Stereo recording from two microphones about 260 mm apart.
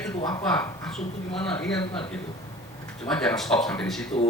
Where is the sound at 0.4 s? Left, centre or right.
Centre.